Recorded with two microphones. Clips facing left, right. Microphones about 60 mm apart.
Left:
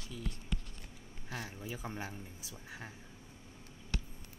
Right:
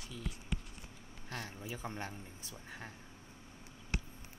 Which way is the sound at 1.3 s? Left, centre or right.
Centre.